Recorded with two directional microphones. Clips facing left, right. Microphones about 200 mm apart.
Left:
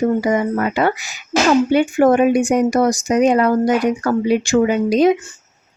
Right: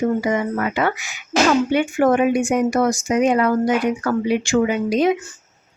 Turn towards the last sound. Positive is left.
turn(degrees=40)  # may be behind; listen again after turning